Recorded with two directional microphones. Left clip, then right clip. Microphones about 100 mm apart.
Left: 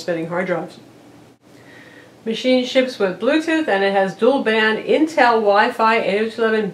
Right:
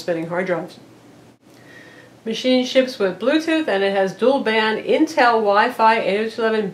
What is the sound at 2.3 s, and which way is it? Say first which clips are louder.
Speech: left 1 dB; 30° right (ahead or behind).